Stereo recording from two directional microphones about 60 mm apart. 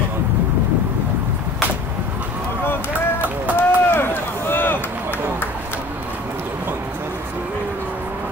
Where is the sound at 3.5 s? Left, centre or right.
Left.